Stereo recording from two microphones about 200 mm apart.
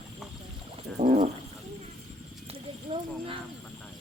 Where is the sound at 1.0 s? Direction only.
30° right (ahead or behind).